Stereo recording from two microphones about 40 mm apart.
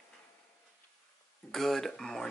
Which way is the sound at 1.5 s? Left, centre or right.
Centre.